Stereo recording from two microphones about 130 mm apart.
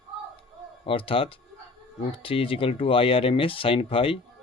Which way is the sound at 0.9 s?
45° left (ahead or behind).